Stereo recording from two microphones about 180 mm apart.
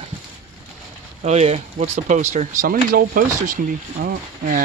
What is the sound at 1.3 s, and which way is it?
Speech, 40° right (ahead or behind).